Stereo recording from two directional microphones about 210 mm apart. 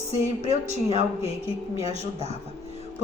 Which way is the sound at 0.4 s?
30° right (ahead or behind).